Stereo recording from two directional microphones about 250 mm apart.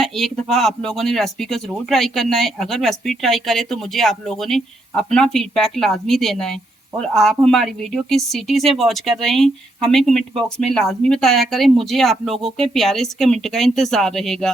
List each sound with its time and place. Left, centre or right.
0.0 s speech: centre
12.2 s speech: right
12.7 s speech: centre